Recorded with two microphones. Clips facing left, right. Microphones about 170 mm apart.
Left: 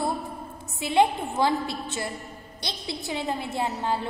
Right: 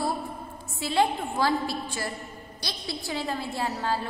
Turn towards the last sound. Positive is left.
turn(degrees=20)  # may be behind; listen again after turning